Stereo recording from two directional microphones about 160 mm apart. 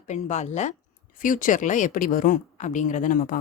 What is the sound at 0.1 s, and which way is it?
A woman's voice, 45° left (ahead or behind).